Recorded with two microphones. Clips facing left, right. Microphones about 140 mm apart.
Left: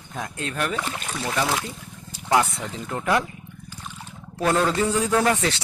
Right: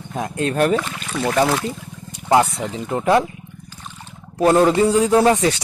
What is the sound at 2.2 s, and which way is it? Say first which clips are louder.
Speech: right 5 dB; 25° right (ahead or behind).